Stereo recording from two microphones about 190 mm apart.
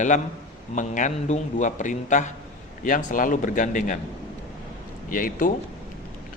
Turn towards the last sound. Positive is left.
turn(degrees=45)  # may be behind; listen again after turning